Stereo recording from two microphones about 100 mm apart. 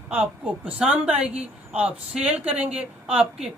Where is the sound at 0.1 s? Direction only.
15° right (ahead or behind).